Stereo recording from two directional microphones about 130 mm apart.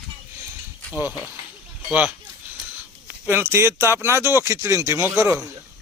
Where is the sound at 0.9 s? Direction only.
15° right (ahead or behind).